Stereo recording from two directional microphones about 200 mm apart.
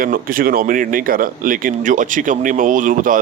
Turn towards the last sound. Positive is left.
turn(degrees=-40)  # may be behind; listen again after turning